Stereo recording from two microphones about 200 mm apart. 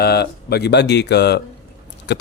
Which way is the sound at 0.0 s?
55° left (ahead or behind).